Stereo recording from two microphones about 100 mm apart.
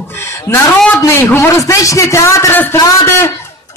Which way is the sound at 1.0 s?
25° left (ahead or behind).